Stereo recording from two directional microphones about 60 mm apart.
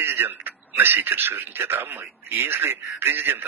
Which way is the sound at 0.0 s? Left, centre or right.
Right.